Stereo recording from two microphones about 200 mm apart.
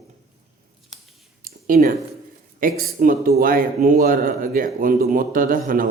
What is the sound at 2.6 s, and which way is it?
A man's voice, 45° right (ahead or behind).